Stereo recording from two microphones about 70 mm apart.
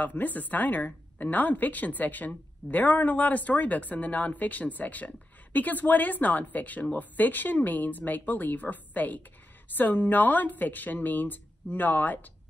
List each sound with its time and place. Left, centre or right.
0.0 s a woman's voice: left